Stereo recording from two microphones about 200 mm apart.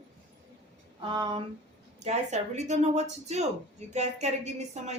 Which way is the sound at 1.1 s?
25° right (ahead or behind).